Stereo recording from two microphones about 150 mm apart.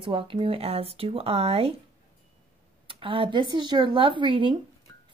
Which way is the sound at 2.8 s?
35° right (ahead or behind).